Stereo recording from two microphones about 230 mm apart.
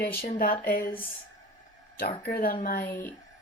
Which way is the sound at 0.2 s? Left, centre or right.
Left.